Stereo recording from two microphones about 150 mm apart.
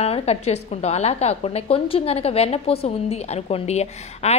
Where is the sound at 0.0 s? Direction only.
45° left (ahead or behind).